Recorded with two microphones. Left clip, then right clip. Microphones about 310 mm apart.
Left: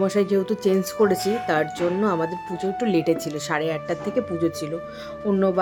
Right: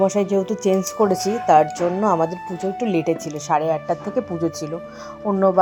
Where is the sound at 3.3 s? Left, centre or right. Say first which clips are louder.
Right 1 dB; left.